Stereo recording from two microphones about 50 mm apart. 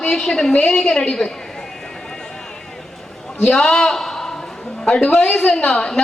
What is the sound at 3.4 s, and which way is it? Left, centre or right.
Speech, centre.